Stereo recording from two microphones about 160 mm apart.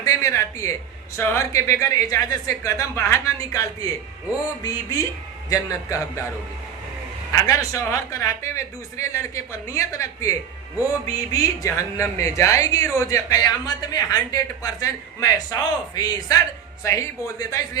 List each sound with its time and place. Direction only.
0.0 s a man's voice: 20° left (ahead or behind)
7.3 s speech: 20° left (ahead or behind)